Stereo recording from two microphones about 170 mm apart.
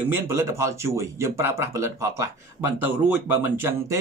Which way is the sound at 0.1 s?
15° right (ahead or behind).